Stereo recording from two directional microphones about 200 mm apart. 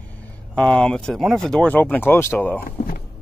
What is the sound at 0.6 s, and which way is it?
Speech, 5° left (ahead or behind).